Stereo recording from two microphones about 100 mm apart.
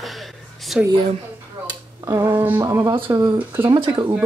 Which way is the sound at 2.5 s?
30° right (ahead or behind).